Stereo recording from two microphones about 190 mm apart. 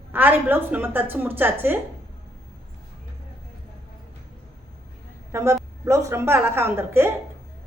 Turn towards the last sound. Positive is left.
turn(degrees=-10)  # may be behind; listen again after turning